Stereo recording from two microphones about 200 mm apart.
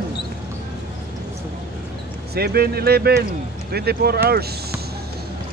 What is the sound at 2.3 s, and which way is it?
Speech, 50° right (ahead or behind).